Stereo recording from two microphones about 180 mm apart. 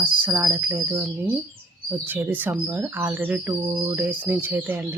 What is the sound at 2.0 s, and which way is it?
Speech, 10° right (ahead or behind).